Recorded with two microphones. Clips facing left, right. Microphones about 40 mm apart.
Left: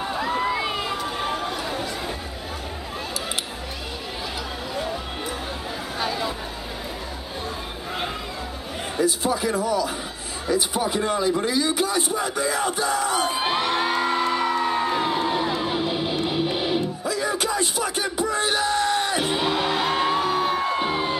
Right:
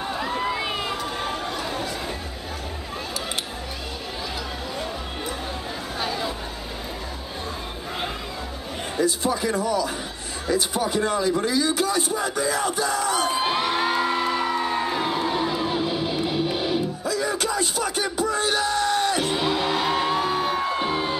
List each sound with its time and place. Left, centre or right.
0.0 s crowd: centre
5.9 s chatter: centre
8.9 s a man's voice: centre
10.4 s a sound: centre; by 18.6 s left
18.6 s music: centre